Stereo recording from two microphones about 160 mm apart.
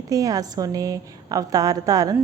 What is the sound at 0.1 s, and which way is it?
A woman's voice, 20° right (ahead or behind).